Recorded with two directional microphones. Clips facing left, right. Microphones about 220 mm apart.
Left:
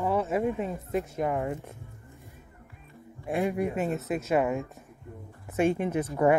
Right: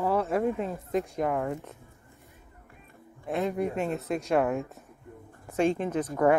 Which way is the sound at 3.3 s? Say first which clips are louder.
Left 1 dB; 10° left (ahead or behind).